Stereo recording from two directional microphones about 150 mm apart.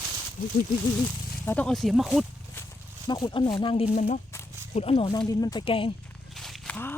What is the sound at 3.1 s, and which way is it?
Speech, 30° left (ahead or behind).